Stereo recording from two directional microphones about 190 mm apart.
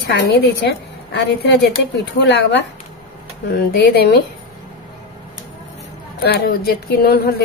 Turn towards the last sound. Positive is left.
turn(degrees=55)  # may be behind; listen again after turning